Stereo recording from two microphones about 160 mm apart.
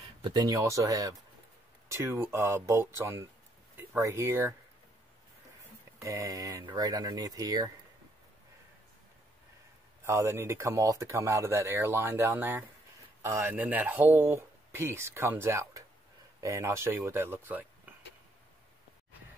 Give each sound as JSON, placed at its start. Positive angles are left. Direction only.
{"t": 0.0, "sound": "speech", "side_deg": -30}
{"t": 6.0, "sound": "speech", "side_deg": -20}
{"t": 10.0, "sound": "speech", "side_deg": -15}